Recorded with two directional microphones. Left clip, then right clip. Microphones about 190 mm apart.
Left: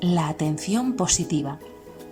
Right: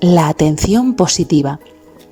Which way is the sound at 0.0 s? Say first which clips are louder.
Right 13 dB; 35° right (ahead or behind).